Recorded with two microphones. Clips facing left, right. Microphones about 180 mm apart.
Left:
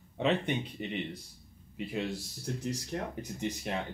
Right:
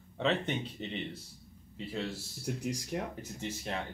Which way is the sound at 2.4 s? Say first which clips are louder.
Right 1 dB; 10° right (ahead or behind).